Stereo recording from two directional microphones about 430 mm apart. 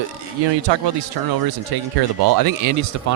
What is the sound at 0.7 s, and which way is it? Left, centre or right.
Speech, right.